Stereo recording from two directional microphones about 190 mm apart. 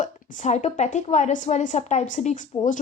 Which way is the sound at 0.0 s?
40° left (ahead or behind).